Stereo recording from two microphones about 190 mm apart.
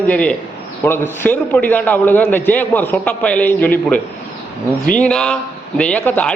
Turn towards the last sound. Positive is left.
turn(degrees=5)  # may be behind; listen again after turning